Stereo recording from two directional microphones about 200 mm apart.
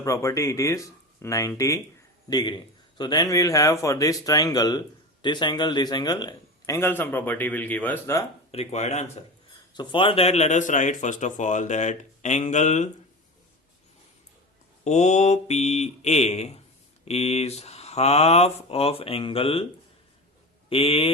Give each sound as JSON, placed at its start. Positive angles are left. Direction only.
{"t": 0.0, "sound": "a man's voice", "side_deg": 15}
{"t": 8.5, "sound": "a man's voice", "side_deg": 35}
{"t": 14.8, "sound": "a man's voice", "side_deg": 35}
{"t": 20.7, "sound": "a man's voice", "side_deg": 30}